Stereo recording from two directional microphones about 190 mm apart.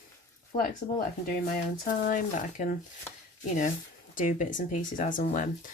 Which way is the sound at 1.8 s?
45° left (ahead or behind).